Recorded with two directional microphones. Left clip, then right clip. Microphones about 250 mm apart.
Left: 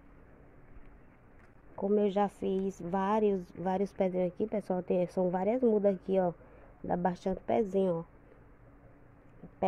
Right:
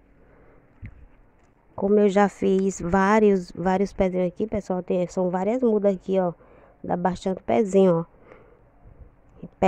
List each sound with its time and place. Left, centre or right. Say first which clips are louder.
1.8 s speech: right 10 dB; right